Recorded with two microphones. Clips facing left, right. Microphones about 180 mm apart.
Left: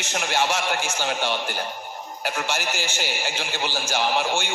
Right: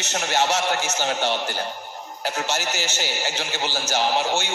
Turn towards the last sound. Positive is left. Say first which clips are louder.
# right 1 dB
turn(degrees=15)  # may be behind; listen again after turning